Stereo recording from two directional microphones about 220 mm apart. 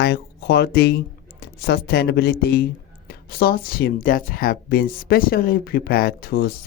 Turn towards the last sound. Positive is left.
turn(degrees=45)  # may be behind; listen again after turning